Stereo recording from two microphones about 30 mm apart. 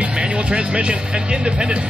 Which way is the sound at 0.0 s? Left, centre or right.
Right.